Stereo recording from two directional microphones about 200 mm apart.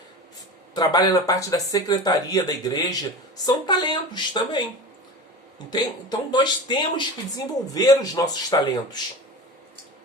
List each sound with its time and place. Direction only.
0.7 s speech: 20° left (ahead or behind)
5.7 s speech: 20° left (ahead or behind)